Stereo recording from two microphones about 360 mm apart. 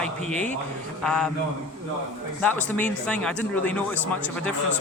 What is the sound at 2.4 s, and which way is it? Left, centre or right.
Speech, centre.